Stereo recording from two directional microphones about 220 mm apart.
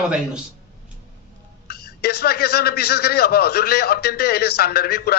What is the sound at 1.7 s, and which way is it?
A man's voice, 45° left (ahead or behind).